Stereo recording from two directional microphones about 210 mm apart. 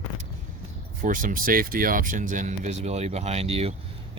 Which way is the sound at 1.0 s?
40° right (ahead or behind).